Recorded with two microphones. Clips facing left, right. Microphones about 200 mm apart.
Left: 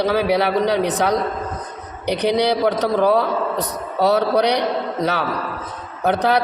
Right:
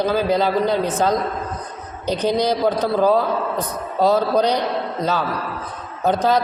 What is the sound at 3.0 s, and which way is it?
A man's voice, 75° left (ahead or behind).